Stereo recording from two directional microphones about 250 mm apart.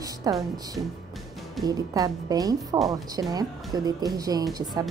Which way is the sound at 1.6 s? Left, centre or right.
Centre.